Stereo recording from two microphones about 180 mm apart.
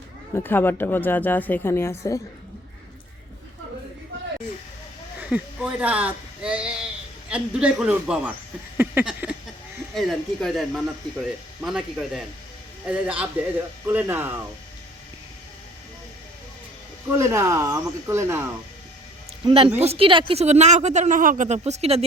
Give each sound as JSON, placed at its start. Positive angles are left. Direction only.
{"t": 0.3, "sound": "speech", "side_deg": 10}
{"t": 5.2, "sound": "speech", "side_deg": -5}
{"t": 17.2, "sound": "speech", "side_deg": -15}
{"t": 19.4, "sound": "speech", "side_deg": -30}